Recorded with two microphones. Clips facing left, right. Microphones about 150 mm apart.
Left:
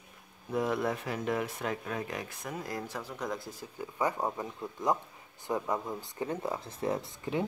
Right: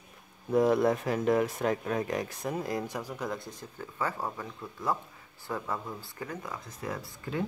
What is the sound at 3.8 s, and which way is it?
Speech, 15° left (ahead or behind).